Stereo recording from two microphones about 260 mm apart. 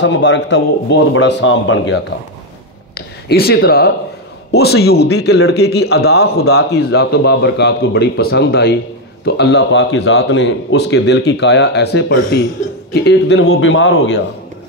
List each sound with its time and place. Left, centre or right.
0.0 s a man's voice: left